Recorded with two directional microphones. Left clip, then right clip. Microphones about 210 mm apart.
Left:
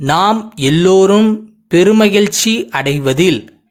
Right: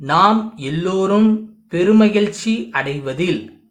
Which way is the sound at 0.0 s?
45° left (ahead or behind).